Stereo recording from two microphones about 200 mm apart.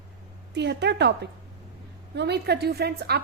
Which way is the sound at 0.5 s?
60° right (ahead or behind).